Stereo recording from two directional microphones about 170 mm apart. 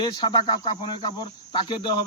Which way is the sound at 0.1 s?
25° left (ahead or behind).